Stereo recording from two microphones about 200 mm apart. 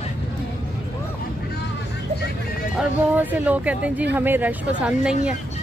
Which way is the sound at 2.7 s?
10° right (ahead or behind).